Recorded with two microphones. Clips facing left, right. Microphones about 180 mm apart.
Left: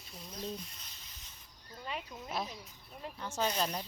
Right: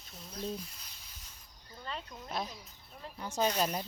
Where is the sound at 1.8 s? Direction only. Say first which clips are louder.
Left 1 dB; 5° left (ahead or behind).